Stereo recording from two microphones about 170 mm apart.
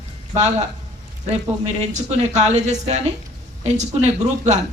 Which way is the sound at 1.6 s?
45° right (ahead or behind).